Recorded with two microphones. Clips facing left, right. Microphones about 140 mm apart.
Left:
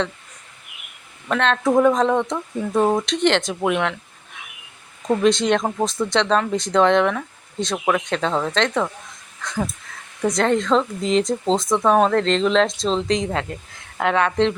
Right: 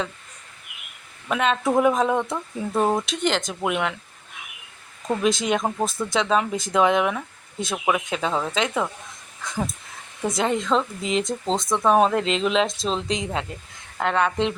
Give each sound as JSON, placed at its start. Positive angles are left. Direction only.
{"t": 1.3, "sound": "speech", "side_deg": -5}
{"t": 5.2, "sound": "speech", "side_deg": -5}
{"t": 10.2, "sound": "speech", "side_deg": 0}